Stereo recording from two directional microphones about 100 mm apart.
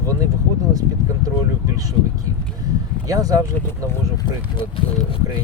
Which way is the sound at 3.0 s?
35° right (ahead or behind).